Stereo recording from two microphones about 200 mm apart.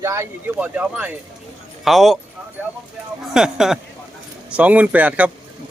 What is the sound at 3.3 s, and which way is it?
Speech, 5° right (ahead or behind).